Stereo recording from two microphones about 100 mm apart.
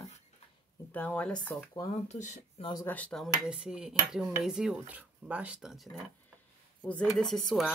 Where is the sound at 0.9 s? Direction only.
15° left (ahead or behind).